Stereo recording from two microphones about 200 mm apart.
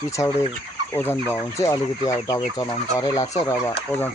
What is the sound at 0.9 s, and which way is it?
Speech, 10° left (ahead or behind).